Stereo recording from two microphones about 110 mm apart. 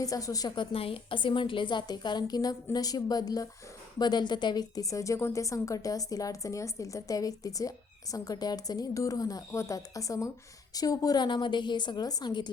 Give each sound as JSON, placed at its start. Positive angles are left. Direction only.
{"t": 0.0, "sound": "a woman's voice", "side_deg": 30}